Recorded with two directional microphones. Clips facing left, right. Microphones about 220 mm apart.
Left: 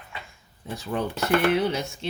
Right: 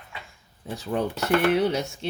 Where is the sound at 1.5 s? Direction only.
40° right (ahead or behind).